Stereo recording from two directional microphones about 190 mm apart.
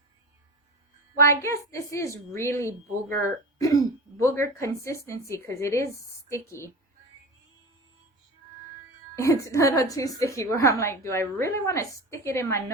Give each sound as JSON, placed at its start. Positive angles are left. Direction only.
{"t": 1.2, "sound": "a woman's voice", "side_deg": 15}
{"t": 9.2, "sound": "a woman's voice", "side_deg": 15}